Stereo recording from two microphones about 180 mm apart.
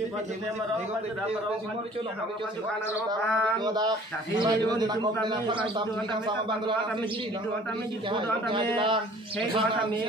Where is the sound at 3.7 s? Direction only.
20° right (ahead or behind).